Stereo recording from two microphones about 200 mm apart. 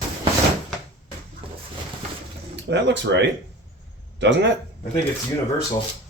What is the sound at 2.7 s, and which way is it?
Speech, 60° right (ahead or behind).